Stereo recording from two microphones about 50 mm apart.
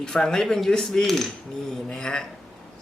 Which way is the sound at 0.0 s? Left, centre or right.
Centre.